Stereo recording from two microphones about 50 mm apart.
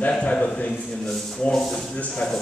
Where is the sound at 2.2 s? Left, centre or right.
Left.